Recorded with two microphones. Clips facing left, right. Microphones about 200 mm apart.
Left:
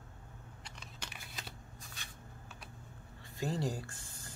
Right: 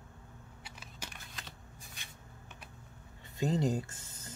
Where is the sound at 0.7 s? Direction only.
5° right (ahead or behind).